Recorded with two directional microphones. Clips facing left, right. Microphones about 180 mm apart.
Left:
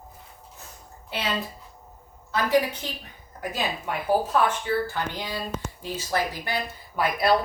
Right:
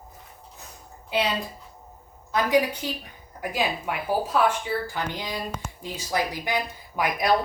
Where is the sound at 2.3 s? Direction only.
15° right (ahead or behind).